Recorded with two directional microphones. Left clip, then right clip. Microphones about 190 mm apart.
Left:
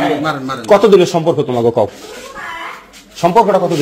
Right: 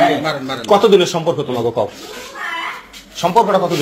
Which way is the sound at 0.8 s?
50° left (ahead or behind).